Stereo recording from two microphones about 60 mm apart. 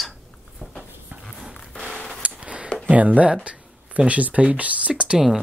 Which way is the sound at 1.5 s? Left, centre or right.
Centre.